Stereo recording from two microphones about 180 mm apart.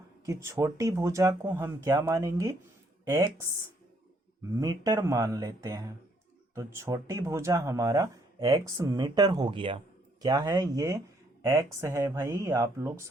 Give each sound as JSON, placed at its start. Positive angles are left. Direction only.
{"t": 0.3, "sound": "speech", "side_deg": -15}
{"t": 4.6, "sound": "speech", "side_deg": -20}